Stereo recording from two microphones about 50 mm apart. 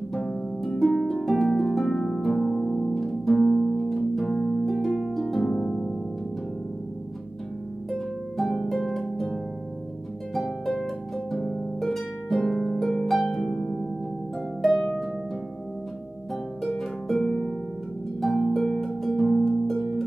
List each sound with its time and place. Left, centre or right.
0.1 s harp: centre
1.7 s harp: centre
2.4 s music: centre
8.4 s harp: centre
17.2 s harp: centre
18.2 s harp: centre